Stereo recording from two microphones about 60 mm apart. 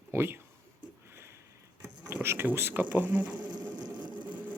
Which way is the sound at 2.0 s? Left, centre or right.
Right.